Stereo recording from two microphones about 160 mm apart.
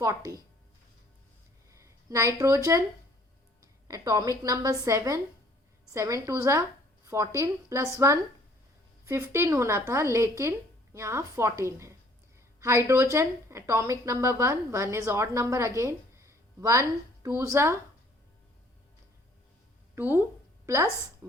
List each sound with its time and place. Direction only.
0.0 s a woman's voice: 20° right (ahead or behind)
1.7 s speech: 20° right (ahead or behind)
3.8 s a woman's voice: 20° right (ahead or behind)
20.0 s a woman's voice: 15° right (ahead or behind)